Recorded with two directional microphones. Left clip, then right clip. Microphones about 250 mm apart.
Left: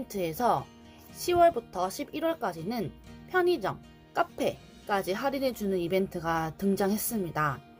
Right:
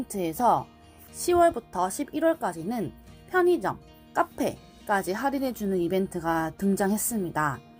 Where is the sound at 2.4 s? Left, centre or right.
Right.